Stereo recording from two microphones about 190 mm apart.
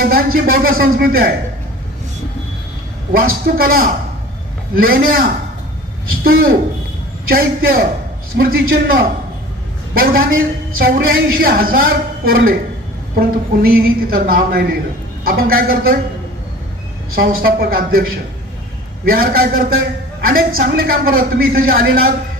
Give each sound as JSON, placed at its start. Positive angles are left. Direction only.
{"t": 0.0, "sound": "a man's voice", "side_deg": -50}
{"t": 3.1, "sound": "a man's voice", "side_deg": -50}
{"t": 17.2, "sound": "a man's voice", "side_deg": -50}